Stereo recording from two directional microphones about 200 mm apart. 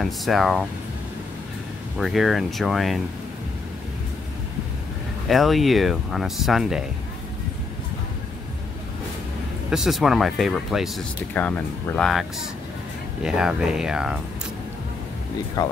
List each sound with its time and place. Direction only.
0.0 s speech: centre (ahead or behind)
2.0 s speech: centre (ahead or behind)
5.3 s speech: centre (ahead or behind)
9.7 s speech: centre (ahead or behind)
15.6 s speech: 20° left (ahead or behind)